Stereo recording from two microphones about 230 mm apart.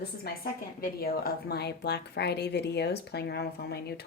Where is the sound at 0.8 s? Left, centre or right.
Left.